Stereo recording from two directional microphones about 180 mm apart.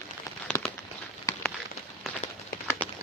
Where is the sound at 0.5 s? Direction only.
15° left (ahead or behind).